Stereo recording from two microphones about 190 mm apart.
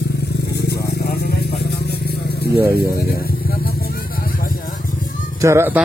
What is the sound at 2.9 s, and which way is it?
Vehicle, 55° left (ahead or behind).